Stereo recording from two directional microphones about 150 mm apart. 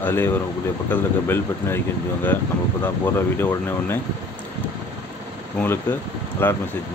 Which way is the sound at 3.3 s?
15° left (ahead or behind).